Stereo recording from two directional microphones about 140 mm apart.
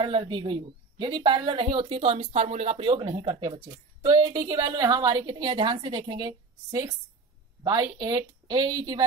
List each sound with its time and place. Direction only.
0.0 s speech: 35° right (ahead or behind)